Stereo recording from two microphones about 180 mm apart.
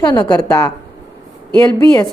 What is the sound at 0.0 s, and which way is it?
Speech, 25° left (ahead or behind).